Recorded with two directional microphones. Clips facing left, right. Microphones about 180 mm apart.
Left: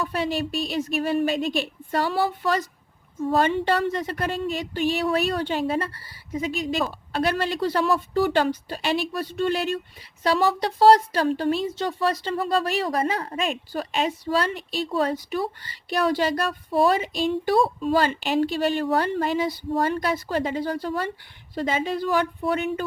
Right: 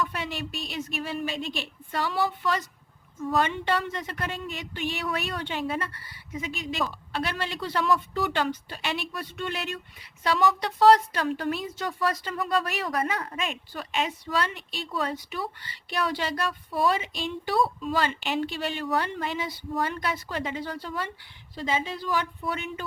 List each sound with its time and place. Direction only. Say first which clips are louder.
0.0 s speech: left 6 dB; 35° left (ahead or behind)